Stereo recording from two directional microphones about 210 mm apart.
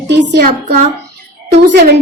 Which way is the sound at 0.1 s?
55° right (ahead or behind).